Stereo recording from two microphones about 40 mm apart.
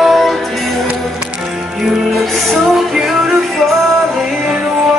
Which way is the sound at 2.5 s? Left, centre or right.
Centre.